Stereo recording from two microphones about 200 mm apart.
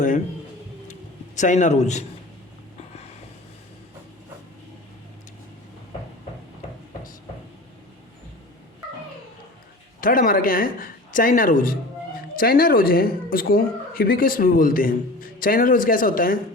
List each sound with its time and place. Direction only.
1.4 s a man's voice: 40° left (ahead or behind)
10.0 s a woman's voice: 45° left (ahead or behind)